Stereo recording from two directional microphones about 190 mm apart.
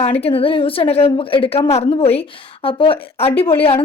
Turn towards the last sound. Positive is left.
turn(degrees=30)  # may be behind; listen again after turning